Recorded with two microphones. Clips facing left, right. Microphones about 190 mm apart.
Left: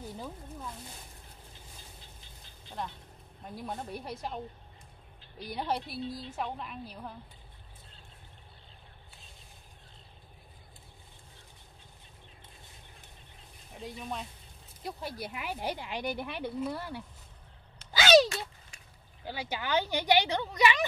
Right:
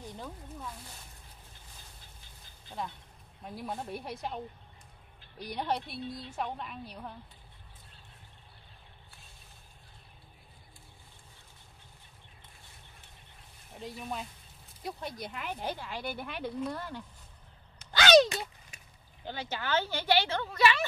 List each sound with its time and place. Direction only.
0.0 s a woman's voice: 5° left (ahead or behind)
2.8 s a woman's voice: centre (ahead or behind)
5.4 s a woman's voice: centre (ahead or behind)
13.7 s a woman's voice: centre (ahead or behind)
17.9 s a sound: 5° left (ahead or behind)
19.2 s speech: 10° left (ahead or behind)